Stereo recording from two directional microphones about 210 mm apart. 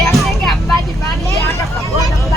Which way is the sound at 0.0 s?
Centre (ahead or behind).